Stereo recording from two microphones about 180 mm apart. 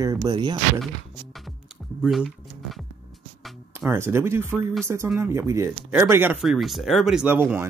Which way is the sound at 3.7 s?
15° right (ahead or behind).